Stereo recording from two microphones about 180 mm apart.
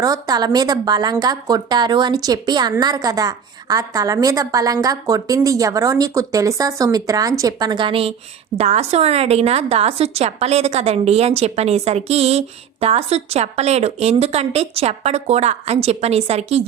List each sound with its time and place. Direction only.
0.0 s a woman's voice: 20° right (ahead or behind)